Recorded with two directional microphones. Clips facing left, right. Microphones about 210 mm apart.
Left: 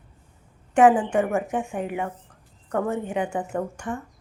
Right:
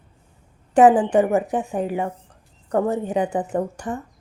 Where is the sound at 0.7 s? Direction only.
35° right (ahead or behind).